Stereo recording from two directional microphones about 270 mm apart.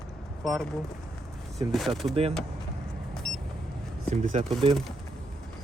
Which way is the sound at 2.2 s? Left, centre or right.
Right.